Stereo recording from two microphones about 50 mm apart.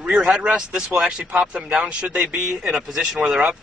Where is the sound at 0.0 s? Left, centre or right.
Centre.